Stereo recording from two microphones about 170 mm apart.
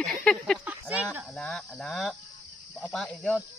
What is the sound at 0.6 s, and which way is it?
Speech, 10° right (ahead or behind).